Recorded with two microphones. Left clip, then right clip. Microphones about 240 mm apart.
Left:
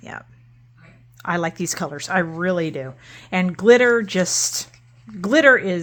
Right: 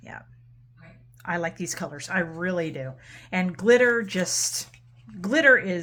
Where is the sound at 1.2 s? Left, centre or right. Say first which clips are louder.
Left 6 dB; left.